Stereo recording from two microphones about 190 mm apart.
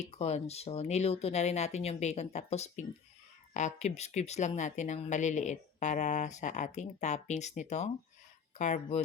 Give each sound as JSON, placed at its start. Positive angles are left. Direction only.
{"t": 0.0, "sound": "speech", "side_deg": 35}